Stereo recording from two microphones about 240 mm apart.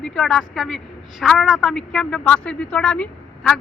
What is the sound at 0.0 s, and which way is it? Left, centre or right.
Speech, centre.